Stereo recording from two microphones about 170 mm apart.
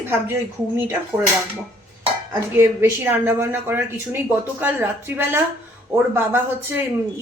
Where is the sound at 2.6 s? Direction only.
15° right (ahead or behind).